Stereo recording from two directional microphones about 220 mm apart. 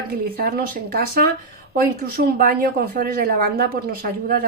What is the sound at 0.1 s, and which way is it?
Speech, 45° right (ahead or behind).